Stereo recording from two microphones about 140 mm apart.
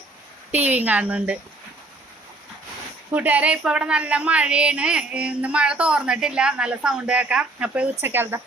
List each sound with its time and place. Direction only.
0.5 s speech: 10° right (ahead or behind)
3.1 s speech: 10° right (ahead or behind)